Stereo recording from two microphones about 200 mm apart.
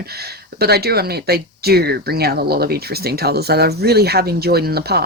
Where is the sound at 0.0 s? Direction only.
50° right (ahead or behind).